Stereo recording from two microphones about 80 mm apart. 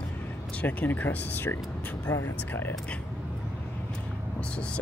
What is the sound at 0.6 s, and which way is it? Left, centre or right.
Speech, left.